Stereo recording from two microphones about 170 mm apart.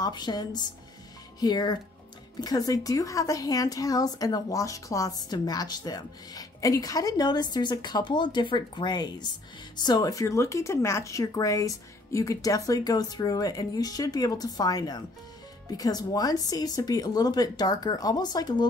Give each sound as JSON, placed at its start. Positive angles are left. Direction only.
{"t": 0.0, "sound": "a woman's voice", "side_deg": 25}